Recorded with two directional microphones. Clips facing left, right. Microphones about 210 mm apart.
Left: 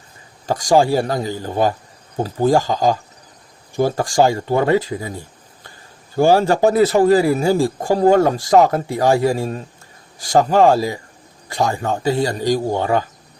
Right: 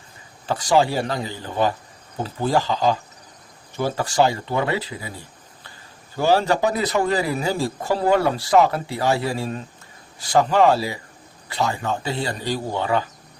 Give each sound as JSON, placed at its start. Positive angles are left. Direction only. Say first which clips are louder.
{"t": 0.4, "sound": "a man's voice", "louder": "left 4 dB", "side_deg": 45}